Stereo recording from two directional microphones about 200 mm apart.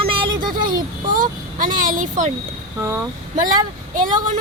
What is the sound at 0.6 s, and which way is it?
A child's voice, 45° right (ahead or behind).